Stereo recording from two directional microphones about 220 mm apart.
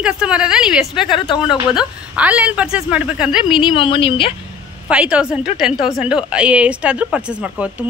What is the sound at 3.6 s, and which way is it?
Speech, 25° left (ahead or behind).